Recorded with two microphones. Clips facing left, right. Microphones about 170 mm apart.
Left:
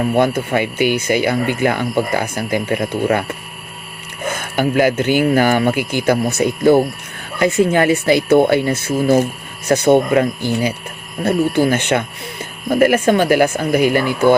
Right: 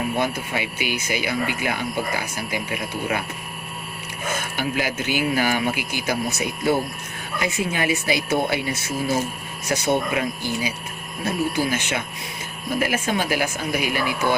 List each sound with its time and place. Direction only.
0.1 s speech: 55° left (ahead or behind)
4.5 s speech: 55° left (ahead or behind)